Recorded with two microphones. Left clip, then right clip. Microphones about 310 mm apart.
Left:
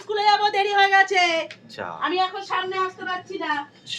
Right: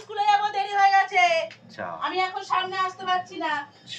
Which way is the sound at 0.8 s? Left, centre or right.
Left.